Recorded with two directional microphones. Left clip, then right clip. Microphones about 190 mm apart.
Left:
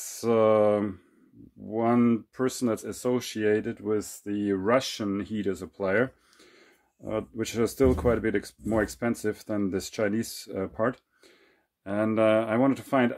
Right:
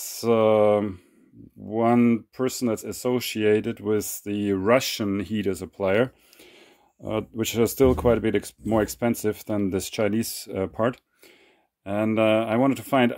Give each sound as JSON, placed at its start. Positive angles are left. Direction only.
{"t": 0.0, "sound": "speech", "side_deg": -20}